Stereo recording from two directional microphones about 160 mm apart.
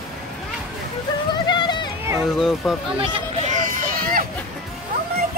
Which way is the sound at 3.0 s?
45° right (ahead or behind).